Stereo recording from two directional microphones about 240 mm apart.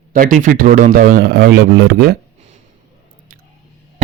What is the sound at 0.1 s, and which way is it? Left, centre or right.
Speech, right.